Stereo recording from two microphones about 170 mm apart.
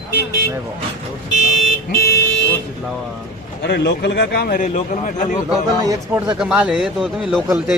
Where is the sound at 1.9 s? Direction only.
70° left (ahead or behind).